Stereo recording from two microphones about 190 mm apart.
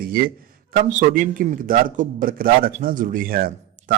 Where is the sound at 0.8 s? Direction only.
45° right (ahead or behind).